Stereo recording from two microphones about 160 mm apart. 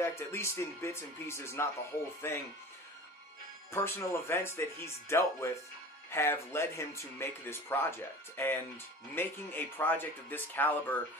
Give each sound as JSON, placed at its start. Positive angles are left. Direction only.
{"t": 0.0, "sound": "speech", "side_deg": 15}
{"t": 3.7, "sound": "speech", "side_deg": 15}